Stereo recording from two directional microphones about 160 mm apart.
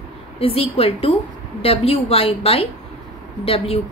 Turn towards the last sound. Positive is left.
turn(degrees=35)  # may be behind; listen again after turning